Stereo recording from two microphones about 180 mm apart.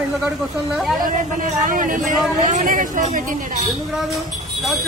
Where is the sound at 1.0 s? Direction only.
45° right (ahead or behind).